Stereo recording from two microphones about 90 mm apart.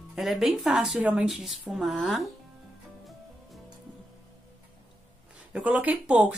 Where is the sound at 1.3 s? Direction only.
Centre (ahead or behind).